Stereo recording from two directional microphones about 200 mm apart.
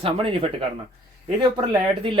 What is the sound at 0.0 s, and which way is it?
Speech, 25° right (ahead or behind).